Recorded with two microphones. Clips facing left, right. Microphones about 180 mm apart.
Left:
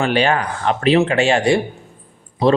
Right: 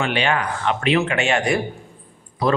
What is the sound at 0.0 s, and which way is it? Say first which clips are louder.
Speech: left 4 dB; 40° left (ahead or behind).